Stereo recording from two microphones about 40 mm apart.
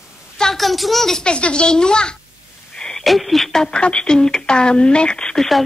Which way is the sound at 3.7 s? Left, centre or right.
Left.